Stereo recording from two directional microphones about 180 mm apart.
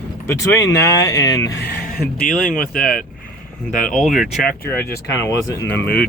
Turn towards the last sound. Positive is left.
turn(degrees=10)  # may be behind; listen again after turning